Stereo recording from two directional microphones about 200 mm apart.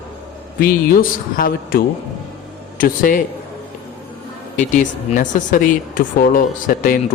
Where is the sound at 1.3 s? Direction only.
45° left (ahead or behind).